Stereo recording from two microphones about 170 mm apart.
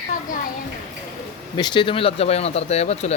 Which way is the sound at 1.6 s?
25° left (ahead or behind).